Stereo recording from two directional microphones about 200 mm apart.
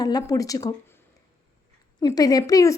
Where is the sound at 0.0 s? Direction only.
20° left (ahead or behind).